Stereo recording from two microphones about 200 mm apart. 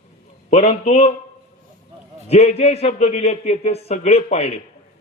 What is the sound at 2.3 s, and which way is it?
Speech, 35° left (ahead or behind).